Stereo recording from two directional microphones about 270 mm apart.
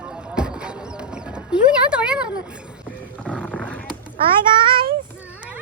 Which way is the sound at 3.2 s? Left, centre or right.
Centre.